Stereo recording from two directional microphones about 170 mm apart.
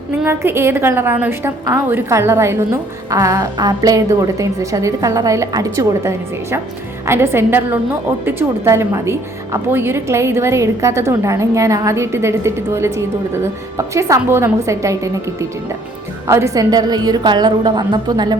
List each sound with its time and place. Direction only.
0.3 s a woman's voice: 15° right (ahead or behind)